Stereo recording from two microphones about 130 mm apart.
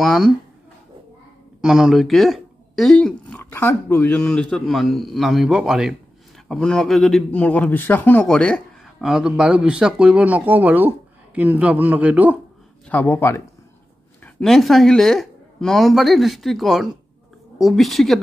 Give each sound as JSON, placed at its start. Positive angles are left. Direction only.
{"t": 0.0, "sound": "speech", "side_deg": 0}
{"t": 1.6, "sound": "speech", "side_deg": -5}
{"t": 9.0, "sound": "speech", "side_deg": -5}
{"t": 12.8, "sound": "speech", "side_deg": 15}
{"t": 14.2, "sound": "speech", "side_deg": 0}